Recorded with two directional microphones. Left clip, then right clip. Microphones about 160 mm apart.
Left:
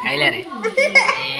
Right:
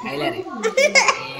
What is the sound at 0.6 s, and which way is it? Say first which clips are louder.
Speech: left 1 dB; 45° right (ahead or behind).